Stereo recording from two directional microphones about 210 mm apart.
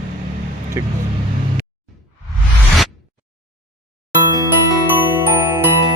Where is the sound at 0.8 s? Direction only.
15° right (ahead or behind).